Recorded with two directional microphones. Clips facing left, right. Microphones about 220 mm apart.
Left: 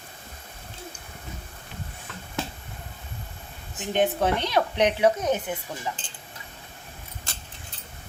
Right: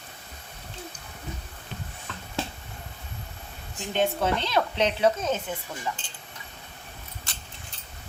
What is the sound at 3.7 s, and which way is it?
Speech, 15° left (ahead or behind).